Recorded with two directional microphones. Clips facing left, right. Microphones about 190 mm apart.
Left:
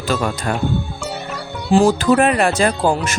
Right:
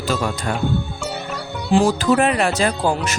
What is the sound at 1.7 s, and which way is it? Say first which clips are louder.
Speech: left 3 dB; 40° left (ahead or behind).